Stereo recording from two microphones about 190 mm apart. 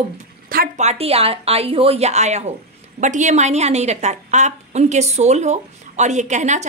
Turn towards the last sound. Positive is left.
turn(degrees=-40)  # may be behind; listen again after turning